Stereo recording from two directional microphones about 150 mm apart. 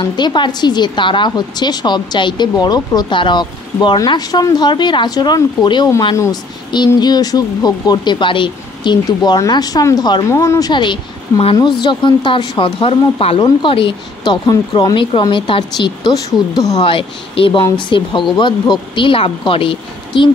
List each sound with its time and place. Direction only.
0.0 s a woman's voice: 30° left (ahead or behind)
7.0 s a woman's voice: 25° left (ahead or behind)
10.7 s speech: 30° left (ahead or behind)